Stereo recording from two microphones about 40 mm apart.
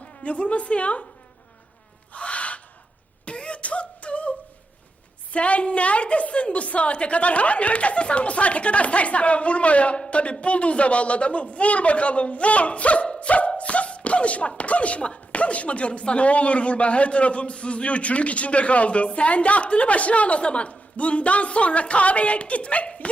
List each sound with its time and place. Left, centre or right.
0.0 s a woman's voice: left
2.1 s owl: left
3.2 s beatboxing: left
5.3 s speech: left
13.6 s beatboxing: left
14.6 s speech: left